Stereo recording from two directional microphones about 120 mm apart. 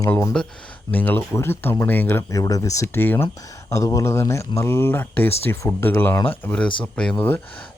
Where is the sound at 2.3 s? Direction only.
30° left (ahead or behind).